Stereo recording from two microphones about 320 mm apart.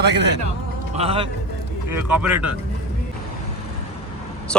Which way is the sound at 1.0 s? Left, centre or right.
Centre.